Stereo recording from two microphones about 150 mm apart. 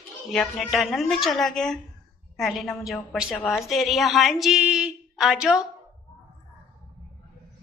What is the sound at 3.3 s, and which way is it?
Speech, 10° left (ahead or behind).